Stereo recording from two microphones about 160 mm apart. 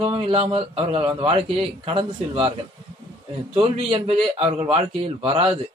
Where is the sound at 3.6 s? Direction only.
35° right (ahead or behind).